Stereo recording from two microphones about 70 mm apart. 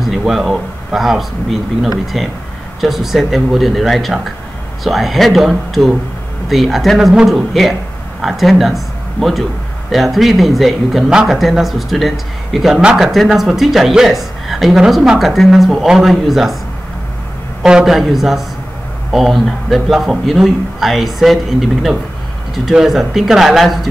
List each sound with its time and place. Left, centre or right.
0.0 s speech: centre
17.6 s speech: centre